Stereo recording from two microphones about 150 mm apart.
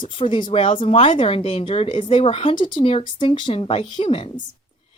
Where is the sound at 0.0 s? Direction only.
35° left (ahead or behind).